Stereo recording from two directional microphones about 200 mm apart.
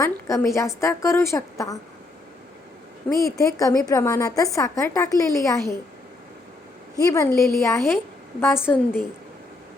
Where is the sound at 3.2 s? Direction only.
15° left (ahead or behind).